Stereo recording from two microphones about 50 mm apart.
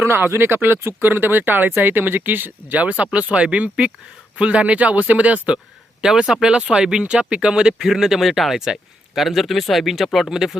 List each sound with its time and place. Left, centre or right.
0.0 s speech: right
3.0 s speech: right
6.0 s speech: centre